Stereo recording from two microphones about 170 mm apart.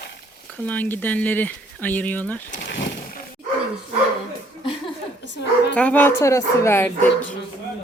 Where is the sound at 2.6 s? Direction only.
90° left.